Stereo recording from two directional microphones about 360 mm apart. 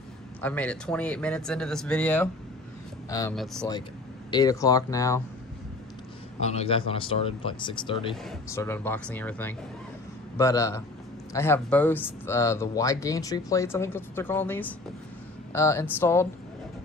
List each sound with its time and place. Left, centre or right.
0.4 s speech: centre
6.4 s speech: centre